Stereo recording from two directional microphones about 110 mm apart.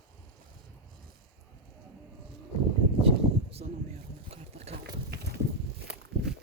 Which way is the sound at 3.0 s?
65° right (ahead or behind).